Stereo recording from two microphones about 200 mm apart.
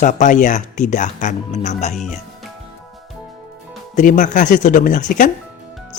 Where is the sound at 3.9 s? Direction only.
40° left (ahead or behind).